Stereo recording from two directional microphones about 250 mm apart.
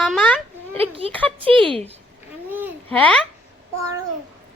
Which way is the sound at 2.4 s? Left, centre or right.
Centre.